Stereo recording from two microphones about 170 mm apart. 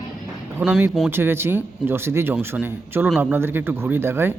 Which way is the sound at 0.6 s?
5° right (ahead or behind).